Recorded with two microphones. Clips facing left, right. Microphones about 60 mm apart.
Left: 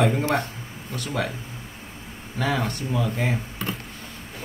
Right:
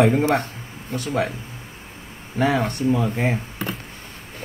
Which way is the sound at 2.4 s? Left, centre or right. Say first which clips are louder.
Right 5 dB; right.